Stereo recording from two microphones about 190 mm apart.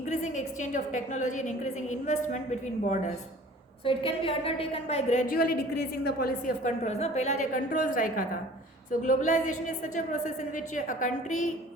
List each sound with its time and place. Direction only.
0.0 s a woman's voice: 40° left (ahead or behind)
3.8 s a woman's voice: 30° left (ahead or behind); by 6.7 s 55° left (ahead or behind)
6.7 s a woman's voice: 35° left (ahead or behind)